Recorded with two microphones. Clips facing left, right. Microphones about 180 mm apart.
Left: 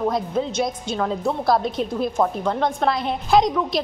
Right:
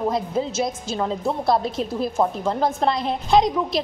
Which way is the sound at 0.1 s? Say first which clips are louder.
Even; 5° right (ahead or behind).